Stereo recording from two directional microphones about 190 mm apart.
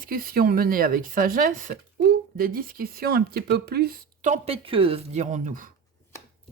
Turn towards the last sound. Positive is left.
turn(degrees=-45)  # may be behind; listen again after turning